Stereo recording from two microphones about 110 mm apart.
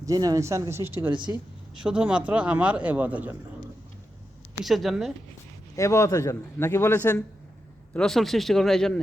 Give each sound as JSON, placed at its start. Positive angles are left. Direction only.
{"t": 0.0, "sound": "speech", "side_deg": -30}
{"t": 1.7, "sound": "speech", "side_deg": -10}
{"t": 4.6, "sound": "speech", "side_deg": 0}
{"t": 5.7, "sound": "a man's voice", "side_deg": 25}
{"t": 7.9, "sound": "speech", "side_deg": 5}